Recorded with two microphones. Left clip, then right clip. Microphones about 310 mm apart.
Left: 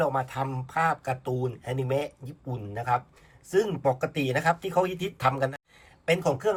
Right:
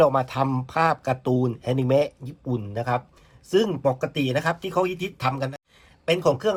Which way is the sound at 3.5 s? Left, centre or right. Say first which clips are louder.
Right 3 dB; centre.